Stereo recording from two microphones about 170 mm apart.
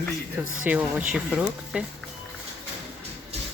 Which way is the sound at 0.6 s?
10° right (ahead or behind).